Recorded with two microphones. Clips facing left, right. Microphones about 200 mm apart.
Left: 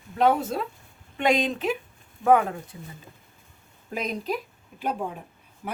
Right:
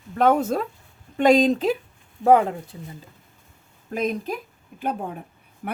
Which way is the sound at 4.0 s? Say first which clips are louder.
Right 3 dB; 50° right (ahead or behind).